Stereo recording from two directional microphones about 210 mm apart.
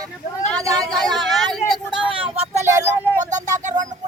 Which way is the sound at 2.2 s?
25° right (ahead or behind).